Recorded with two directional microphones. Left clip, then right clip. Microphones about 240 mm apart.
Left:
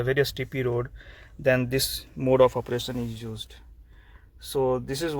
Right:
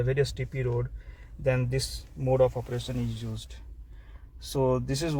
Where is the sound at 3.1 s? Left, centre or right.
Left.